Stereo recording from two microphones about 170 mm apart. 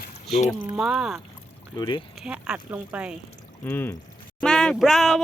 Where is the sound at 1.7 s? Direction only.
25° left (ahead or behind).